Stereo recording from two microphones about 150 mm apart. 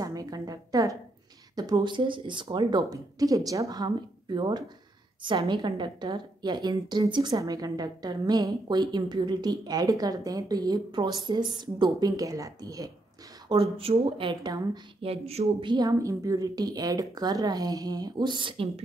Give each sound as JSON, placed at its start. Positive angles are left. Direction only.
{"t": 0.0, "sound": "music", "side_deg": -25}
{"t": 1.5, "sound": "a woman's voice", "side_deg": -25}
{"t": 13.5, "sound": "speech", "side_deg": -40}
{"t": 15.0, "sound": "a woman's voice", "side_deg": -40}